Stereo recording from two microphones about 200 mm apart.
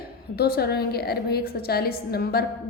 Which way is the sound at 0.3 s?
50° left (ahead or behind).